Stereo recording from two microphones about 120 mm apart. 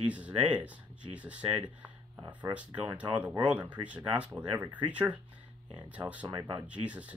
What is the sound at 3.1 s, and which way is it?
Speech, 10° right (ahead or behind).